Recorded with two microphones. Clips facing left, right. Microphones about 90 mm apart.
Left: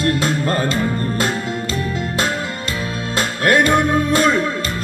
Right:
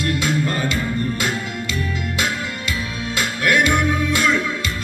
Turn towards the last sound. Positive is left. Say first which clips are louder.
# left 4 dB
turn(degrees=40)  # may be behind; listen again after turning